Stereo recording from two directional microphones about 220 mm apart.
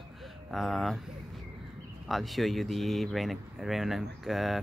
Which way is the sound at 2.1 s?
Centre (ahead or behind).